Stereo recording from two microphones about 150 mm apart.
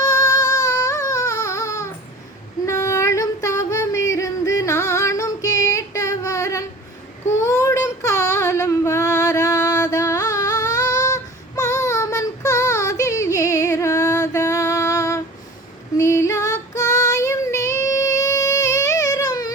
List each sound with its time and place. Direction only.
0.0 s music: 20° left (ahead or behind)
2.6 s female singing: 20° left (ahead or behind)
7.3 s child singing: 20° left (ahead or behind)